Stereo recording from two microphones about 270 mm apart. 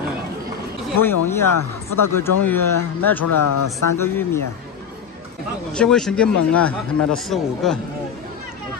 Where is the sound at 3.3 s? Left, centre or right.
Left.